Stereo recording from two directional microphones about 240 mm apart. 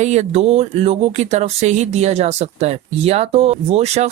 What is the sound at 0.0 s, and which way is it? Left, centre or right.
Speech, right.